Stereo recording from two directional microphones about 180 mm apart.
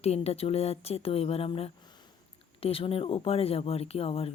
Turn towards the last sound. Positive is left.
turn(degrees=30)  # may be behind; listen again after turning